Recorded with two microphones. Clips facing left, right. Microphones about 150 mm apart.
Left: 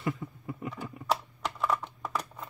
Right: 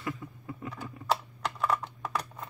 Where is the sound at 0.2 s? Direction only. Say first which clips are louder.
Left 3 dB; 25° left (ahead or behind).